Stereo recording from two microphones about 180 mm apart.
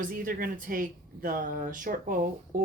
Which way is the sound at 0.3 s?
50° right (ahead or behind).